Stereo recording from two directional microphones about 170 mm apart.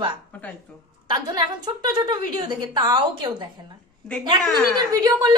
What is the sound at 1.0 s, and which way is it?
A woman's voice, 25° right (ahead or behind).